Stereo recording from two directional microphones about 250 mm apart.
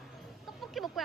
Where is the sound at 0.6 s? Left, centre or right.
Centre.